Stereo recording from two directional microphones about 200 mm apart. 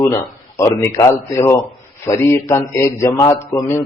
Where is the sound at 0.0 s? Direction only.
15° left (ahead or behind).